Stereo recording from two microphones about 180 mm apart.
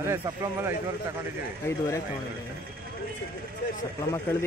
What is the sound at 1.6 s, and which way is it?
Speech, 15° left (ahead or behind).